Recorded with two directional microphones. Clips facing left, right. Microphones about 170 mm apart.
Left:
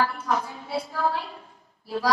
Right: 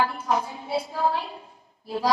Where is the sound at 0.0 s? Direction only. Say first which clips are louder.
Right 1 dB; 25° right (ahead or behind).